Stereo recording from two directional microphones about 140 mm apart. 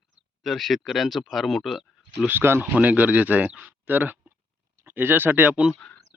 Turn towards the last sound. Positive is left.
turn(degrees=10)  # may be behind; listen again after turning